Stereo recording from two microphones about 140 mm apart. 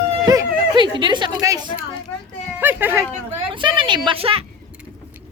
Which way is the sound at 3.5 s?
35° right (ahead or behind).